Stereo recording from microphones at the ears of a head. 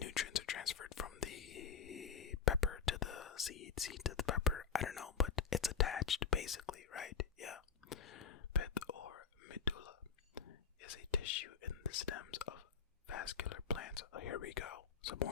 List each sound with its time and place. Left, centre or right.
0.0 s whispering: left